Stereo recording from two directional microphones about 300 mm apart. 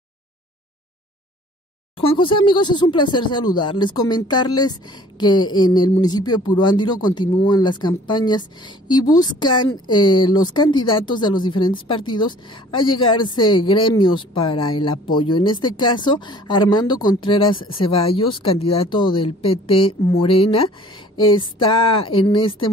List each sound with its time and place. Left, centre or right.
2.0 s a woman's voice: centre